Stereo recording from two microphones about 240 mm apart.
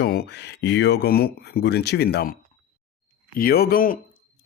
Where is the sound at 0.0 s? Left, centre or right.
Left.